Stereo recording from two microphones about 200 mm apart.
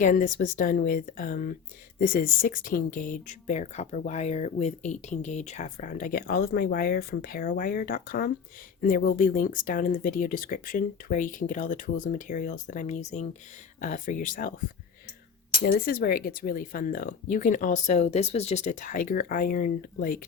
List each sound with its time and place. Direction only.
0.0 s speech: 40° left (ahead or behind)
15.6 s speech: 50° left (ahead or behind)